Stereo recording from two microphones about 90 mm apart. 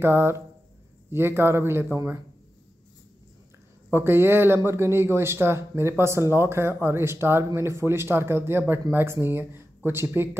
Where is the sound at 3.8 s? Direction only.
25° right (ahead or behind).